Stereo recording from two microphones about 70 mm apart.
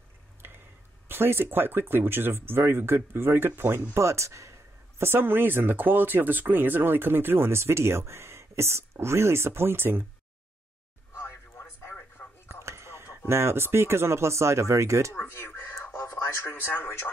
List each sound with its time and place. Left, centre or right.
1.0 s speech: right
3.9 s speech: right
11.1 s a sound: left
12.6 s a sound: right
13.3 s speech: right
15.1 s radio: left